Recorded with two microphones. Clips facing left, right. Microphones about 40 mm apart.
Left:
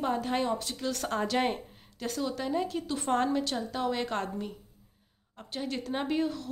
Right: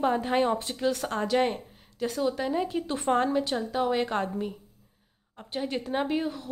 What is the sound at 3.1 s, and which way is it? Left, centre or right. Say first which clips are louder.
A woman's voice: right 3 dB; centre.